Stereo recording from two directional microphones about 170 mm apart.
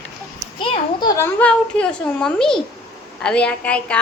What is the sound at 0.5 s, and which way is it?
A woman's voice, 30° left (ahead or behind).